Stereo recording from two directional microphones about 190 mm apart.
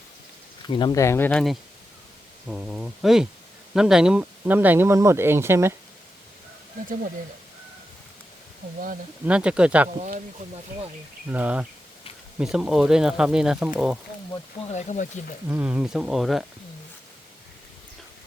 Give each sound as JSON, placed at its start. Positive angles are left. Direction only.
{"t": 0.7, "sound": "speech", "side_deg": 25}
{"t": 9.2, "sound": "speech", "side_deg": -5}
{"t": 11.3, "sound": "speech", "side_deg": -5}
{"t": 14.7, "sound": "speech", "side_deg": 40}
{"t": 15.4, "sound": "speech", "side_deg": -10}